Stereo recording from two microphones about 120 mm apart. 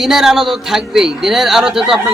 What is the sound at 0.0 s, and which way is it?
A man's voice, 5° right (ahead or behind).